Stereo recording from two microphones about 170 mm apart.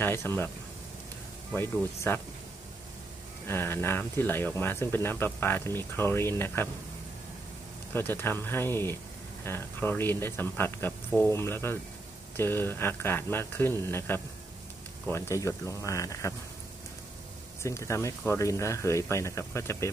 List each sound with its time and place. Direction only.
0.0 s speech: 15° left (ahead or behind)
1.5 s speech: 15° left (ahead or behind)
3.4 s speech: 15° left (ahead or behind)
7.9 s speech: 15° left (ahead or behind)
17.6 s speech: 15° left (ahead or behind)